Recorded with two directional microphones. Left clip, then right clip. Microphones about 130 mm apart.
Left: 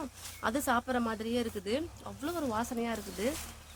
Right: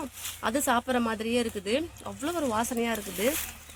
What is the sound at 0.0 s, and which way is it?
Speech, 30° right (ahead or behind).